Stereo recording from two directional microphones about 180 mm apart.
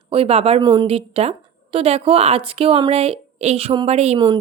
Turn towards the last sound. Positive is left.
turn(degrees=-35)  # may be behind; listen again after turning